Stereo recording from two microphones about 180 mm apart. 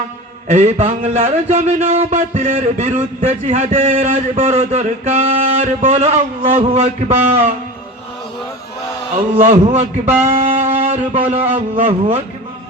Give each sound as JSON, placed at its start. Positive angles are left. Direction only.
{"t": 0.4, "sound": "a man's voice", "side_deg": -40}
{"t": 9.3, "sound": "a man's voice", "side_deg": -45}
{"t": 10.6, "sound": "a sound", "side_deg": -40}
{"t": 11.7, "sound": "a man's voice", "side_deg": -30}